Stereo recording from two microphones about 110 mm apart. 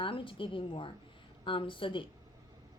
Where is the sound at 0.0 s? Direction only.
50° left (ahead or behind).